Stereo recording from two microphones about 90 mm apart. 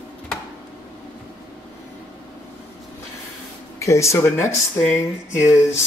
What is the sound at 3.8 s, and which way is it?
Speech, 35° left (ahead or behind).